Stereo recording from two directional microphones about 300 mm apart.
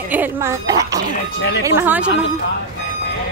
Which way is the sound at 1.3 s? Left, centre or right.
Left.